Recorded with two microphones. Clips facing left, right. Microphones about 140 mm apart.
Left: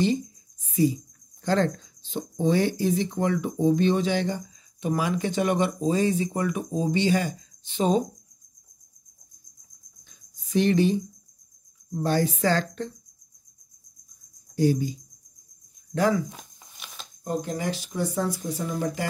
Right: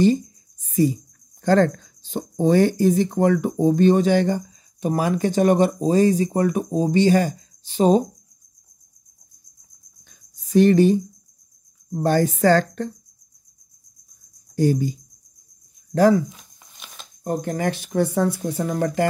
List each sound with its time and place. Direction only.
1.4 s speech: 50° right (ahead or behind)
10.0 s a sound: 45° right (ahead or behind)
11.9 s speech: 50° right (ahead or behind)
14.5 s speech: 50° right (ahead or behind)
16.7 s shuffling cards: centre (ahead or behind)
17.2 s speech: 60° right (ahead or behind)